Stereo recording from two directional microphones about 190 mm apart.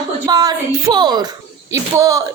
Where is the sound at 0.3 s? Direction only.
20° right (ahead or behind).